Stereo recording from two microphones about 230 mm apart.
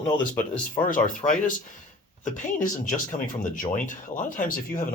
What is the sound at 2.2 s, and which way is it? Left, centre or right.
Speech, left.